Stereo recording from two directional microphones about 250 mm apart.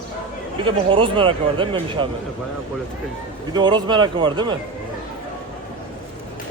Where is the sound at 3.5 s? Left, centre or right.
Centre.